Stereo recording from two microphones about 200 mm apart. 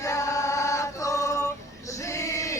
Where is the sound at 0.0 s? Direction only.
15° left (ahead or behind).